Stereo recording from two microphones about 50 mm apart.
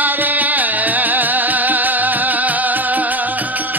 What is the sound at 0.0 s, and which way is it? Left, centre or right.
Music, right.